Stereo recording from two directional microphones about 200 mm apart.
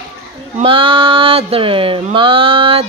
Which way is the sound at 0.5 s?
25° right (ahead or behind).